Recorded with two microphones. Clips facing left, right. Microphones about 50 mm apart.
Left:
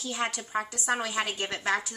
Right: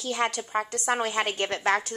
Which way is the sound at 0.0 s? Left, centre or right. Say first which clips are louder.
Right 4 dB; right.